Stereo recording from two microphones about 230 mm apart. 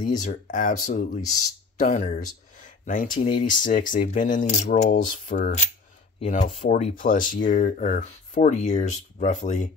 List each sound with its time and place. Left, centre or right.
0.0 s speech: left